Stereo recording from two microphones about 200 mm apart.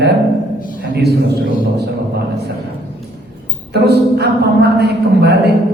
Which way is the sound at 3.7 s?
55° right (ahead or behind).